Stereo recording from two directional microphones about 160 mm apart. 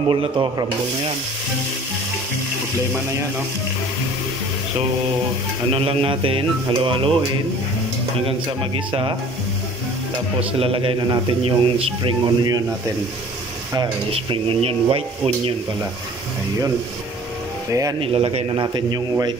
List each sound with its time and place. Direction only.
0.1 s speech: 30° right (ahead or behind)
5.7 s speech: 35° right (ahead or behind)
8.3 s speech: 35° right (ahead or behind)
10.6 s a man's voice: 35° right (ahead or behind)
13.7 s speech: 35° right (ahead or behind)
17.6 s a man's voice: 20° right (ahead or behind)
18.0 s speech: 35° right (ahead or behind)